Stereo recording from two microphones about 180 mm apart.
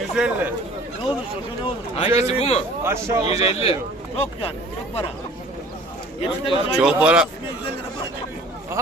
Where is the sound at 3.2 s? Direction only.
35° left (ahead or behind).